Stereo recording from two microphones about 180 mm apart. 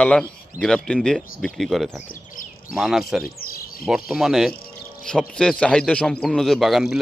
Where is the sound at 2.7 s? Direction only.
Centre (ahead or behind).